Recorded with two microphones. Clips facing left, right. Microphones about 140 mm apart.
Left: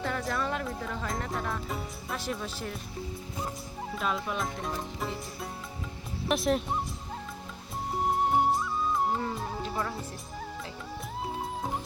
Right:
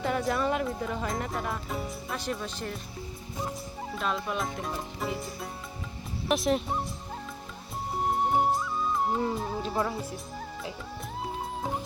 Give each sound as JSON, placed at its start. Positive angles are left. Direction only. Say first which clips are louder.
{"t": 0.0, "sound": "speech", "louder": "right 4 dB", "side_deg": -20}
{"t": 1.3, "sound": "speech", "louder": "right 1 dB", "side_deg": -5}
{"t": 3.9, "sound": "speech", "louder": "right 1 dB", "side_deg": 0}
{"t": 8.3, "sound": "music", "louder": "even", "side_deg": 0}
{"t": 9.3, "sound": "speech", "louder": "right 3 dB", "side_deg": 0}
{"t": 9.6, "sound": "speech", "louder": "right 4 dB", "side_deg": -20}